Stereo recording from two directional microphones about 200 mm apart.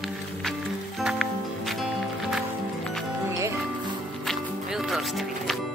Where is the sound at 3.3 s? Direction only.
15° right (ahead or behind).